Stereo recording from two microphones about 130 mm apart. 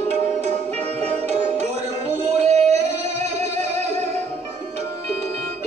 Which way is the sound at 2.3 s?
55° right (ahead or behind).